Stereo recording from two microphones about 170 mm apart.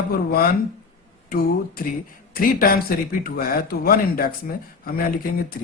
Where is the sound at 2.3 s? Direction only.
55° left (ahead or behind).